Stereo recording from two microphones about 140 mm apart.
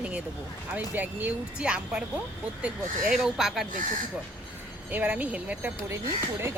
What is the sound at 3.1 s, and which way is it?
Speech, centre (ahead or behind).